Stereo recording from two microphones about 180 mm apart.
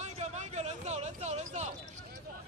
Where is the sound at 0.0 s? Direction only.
40° right (ahead or behind).